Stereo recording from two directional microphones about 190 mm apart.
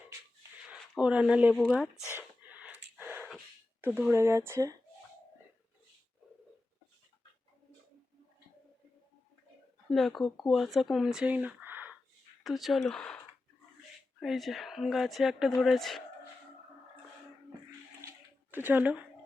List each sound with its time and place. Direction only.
0.7 s speech: 5° right (ahead or behind)
2.1 s a sound: 10° right (ahead or behind)
9.9 s speech: centre (ahead or behind)
18.5 s speech: 10° right (ahead or behind)